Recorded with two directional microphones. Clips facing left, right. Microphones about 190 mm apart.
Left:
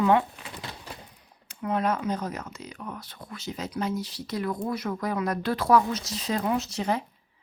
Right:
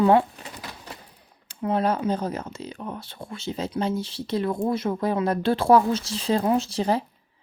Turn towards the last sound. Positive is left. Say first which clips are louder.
# right 4 dB
turn(degrees=-30)  # may be behind; listen again after turning